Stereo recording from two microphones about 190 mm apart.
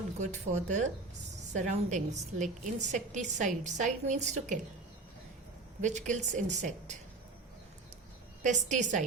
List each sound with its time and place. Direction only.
0.2 s a woman's voice: 40° right (ahead or behind)
6.1 s a woman's voice: 40° right (ahead or behind)
8.4 s a woman's voice: 40° right (ahead or behind)